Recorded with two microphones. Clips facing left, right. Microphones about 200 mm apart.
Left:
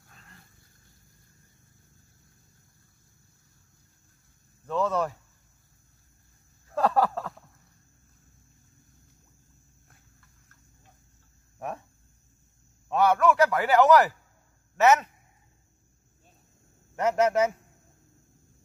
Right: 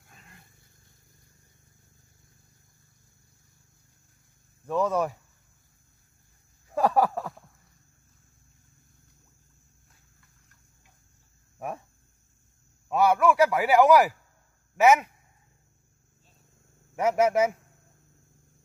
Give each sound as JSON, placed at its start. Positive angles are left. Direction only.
{"t": 0.1, "sound": "dog", "side_deg": -15}
{"t": 4.6, "sound": "a man's voice", "side_deg": -10}
{"t": 6.7, "sound": "a sound", "side_deg": -10}
{"t": 12.8, "sound": "a man's voice", "side_deg": -10}
{"t": 16.9, "sound": "a man's voice", "side_deg": -10}